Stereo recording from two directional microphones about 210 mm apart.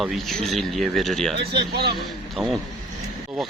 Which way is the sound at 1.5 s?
50° right (ahead or behind).